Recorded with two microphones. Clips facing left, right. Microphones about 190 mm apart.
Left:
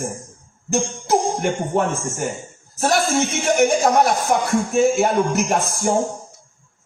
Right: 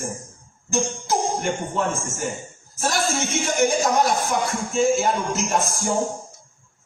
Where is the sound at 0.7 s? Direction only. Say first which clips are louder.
Left 4 dB; 60° left (ahead or behind).